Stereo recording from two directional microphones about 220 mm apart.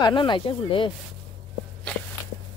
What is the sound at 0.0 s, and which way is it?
Speech, 20° left (ahead or behind).